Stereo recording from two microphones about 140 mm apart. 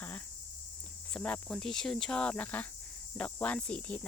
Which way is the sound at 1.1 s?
5° left (ahead or behind).